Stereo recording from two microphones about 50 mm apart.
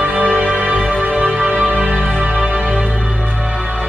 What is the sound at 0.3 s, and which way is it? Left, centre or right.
Music, centre.